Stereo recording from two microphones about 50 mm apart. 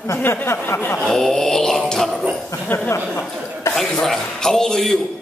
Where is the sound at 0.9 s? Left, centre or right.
Centre.